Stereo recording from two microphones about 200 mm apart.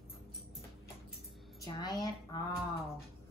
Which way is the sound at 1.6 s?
20° left (ahead or behind).